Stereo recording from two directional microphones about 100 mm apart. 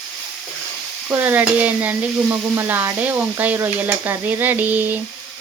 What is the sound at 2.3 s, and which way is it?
Stir, 25° right (ahead or behind).